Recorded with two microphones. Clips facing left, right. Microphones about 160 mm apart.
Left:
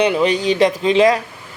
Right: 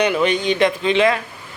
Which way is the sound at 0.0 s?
30° left (ahead or behind).